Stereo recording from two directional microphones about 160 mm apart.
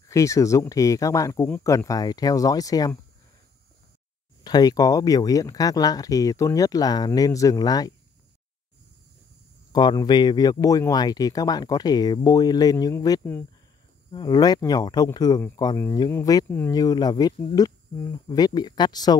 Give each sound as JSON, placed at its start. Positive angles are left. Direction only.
{"t": 0.1, "sound": "speech", "side_deg": 20}
{"t": 4.4, "sound": "speech", "side_deg": 25}
{"t": 9.7, "sound": "speech", "side_deg": 25}
{"t": 14.1, "sound": "speech", "side_deg": 25}